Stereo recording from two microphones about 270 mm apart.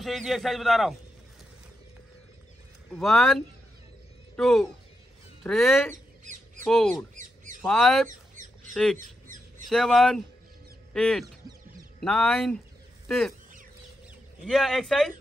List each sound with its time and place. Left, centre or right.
0.0 s a man's voice: centre
2.9 s a man's voice: centre
8.1 s squawk: right
9.7 s a man's voice: centre
14.4 s a man's voice: centre